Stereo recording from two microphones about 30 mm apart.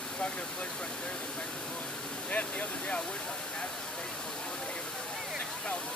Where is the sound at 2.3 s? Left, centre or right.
Left.